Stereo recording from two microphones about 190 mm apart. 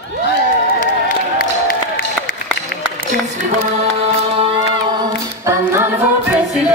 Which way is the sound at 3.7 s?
30° right (ahead or behind).